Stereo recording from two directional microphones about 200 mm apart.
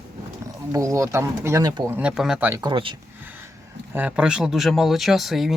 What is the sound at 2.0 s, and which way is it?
Speech, 5° right (ahead or behind).